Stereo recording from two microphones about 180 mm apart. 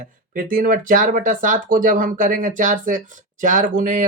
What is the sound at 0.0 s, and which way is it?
Speech, 50° right (ahead or behind).